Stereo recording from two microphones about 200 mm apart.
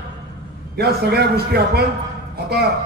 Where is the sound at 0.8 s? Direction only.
50° right (ahead or behind).